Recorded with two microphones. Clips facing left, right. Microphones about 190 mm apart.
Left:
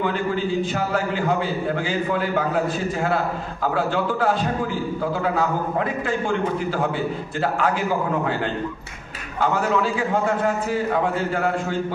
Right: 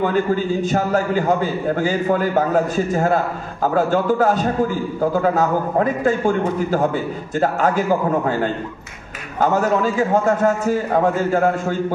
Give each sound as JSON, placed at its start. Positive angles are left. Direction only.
{"t": 0.0, "sound": "a man's voice", "side_deg": -45}